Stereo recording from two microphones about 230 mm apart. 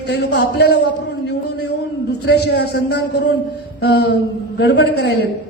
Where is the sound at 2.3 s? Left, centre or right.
Left.